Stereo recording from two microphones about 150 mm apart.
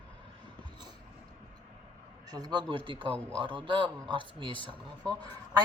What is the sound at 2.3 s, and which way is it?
Speech, 30° right (ahead or behind).